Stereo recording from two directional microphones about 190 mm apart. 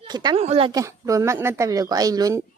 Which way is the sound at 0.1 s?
20° right (ahead or behind).